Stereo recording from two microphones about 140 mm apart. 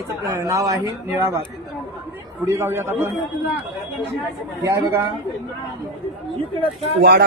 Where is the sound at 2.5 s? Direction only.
20° right (ahead or behind).